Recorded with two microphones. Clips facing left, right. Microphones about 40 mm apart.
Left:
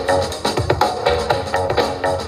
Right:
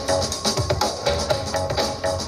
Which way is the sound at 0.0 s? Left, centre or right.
Left.